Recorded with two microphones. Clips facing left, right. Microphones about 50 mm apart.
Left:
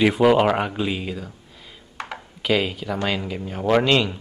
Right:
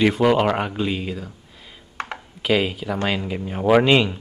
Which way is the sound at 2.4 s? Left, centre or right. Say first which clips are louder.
Right 1 dB; centre.